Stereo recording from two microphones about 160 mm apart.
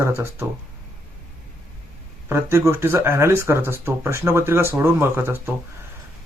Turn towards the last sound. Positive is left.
turn(degrees=-15)  # may be behind; listen again after turning